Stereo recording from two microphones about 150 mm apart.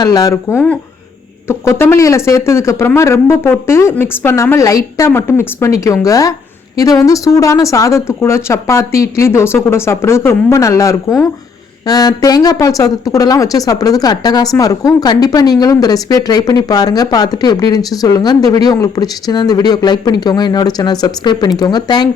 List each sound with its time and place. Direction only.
0.0 s a woman's voice: 25° left (ahead or behind)